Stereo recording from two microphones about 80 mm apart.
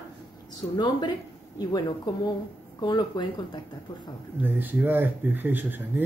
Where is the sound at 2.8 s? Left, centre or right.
Left.